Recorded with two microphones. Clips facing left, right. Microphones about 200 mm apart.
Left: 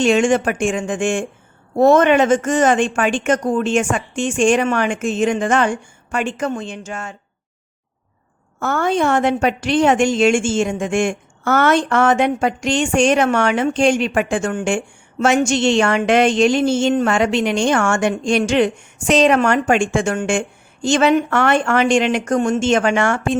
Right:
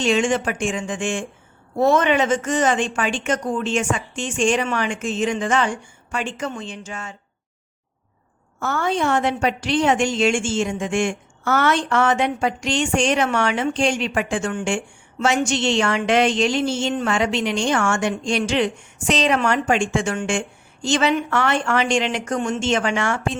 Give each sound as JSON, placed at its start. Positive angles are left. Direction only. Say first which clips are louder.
{"t": 0.0, "sound": "a woman's voice", "louder": "left 5 dB", "side_deg": 50}
{"t": 8.5, "sound": "a woman's voice", "louder": "left 4 dB", "side_deg": 50}